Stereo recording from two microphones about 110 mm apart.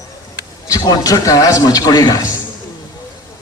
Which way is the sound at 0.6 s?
35° left (ahead or behind).